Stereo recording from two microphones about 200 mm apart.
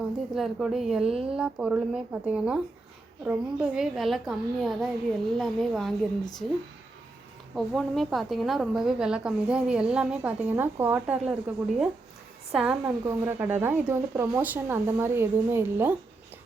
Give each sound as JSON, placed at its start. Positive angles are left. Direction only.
{"t": 0.3, "sound": "a woman's voice", "side_deg": 0}
{"t": 1.1, "sound": "speech", "side_deg": -30}
{"t": 1.4, "sound": "a woman's voice", "side_deg": -5}
{"t": 7.5, "sound": "a woman's voice", "side_deg": 0}